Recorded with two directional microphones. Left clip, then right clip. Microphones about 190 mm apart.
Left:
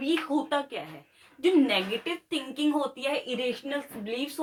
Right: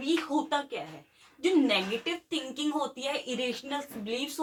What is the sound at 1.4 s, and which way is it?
A woman's voice, 25° left (ahead or behind).